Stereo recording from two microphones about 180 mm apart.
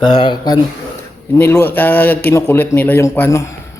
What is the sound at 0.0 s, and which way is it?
Speech, 25° left (ahead or behind).